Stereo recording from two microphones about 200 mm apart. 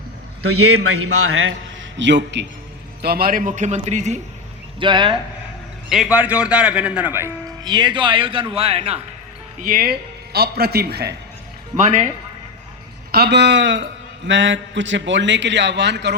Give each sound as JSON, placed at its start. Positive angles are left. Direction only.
{"t": 0.4, "sound": "a man's voice", "side_deg": -90}
{"t": 2.0, "sound": "a man's voice", "side_deg": -65}
{"t": 3.0, "sound": "a man's voice", "side_deg": -50}
{"t": 4.8, "sound": "speech", "side_deg": -25}
{"t": 5.9, "sound": "speech", "side_deg": -5}
{"t": 9.6, "sound": "a man's voice", "side_deg": -45}
{"t": 13.1, "sound": "a man's voice", "side_deg": -50}